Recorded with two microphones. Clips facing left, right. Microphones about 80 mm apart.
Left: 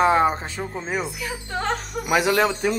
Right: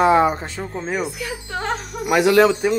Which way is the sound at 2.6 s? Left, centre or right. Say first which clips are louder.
Right 4 dB; centre.